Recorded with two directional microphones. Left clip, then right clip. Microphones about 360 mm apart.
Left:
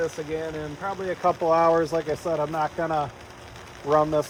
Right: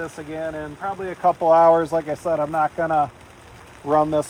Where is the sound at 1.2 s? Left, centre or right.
Right.